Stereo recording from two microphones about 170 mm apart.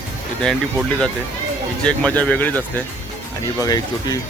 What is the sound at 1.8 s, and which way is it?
Speech, 5° left (ahead or behind).